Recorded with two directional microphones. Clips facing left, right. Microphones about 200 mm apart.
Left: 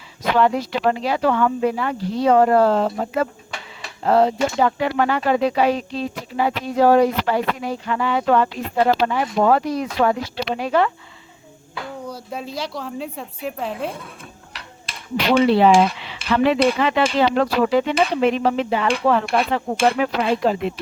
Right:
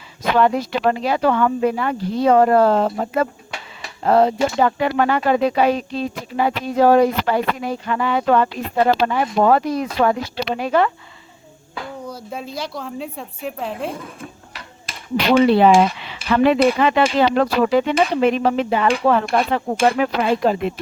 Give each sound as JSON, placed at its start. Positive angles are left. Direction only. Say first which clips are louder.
{"t": 0.3, "sound": "speech", "louder": "right 1 dB", "side_deg": -50}
{"t": 12.0, "sound": "a woman's voice", "louder": "even", "side_deg": 0}
{"t": 15.5, "sound": "speech", "louder": "right 1 dB", "side_deg": -50}